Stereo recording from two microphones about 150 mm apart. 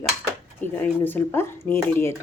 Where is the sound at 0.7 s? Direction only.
10° left (ahead or behind).